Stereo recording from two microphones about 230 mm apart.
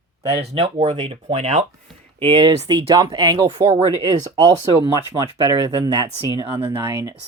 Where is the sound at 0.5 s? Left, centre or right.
Right.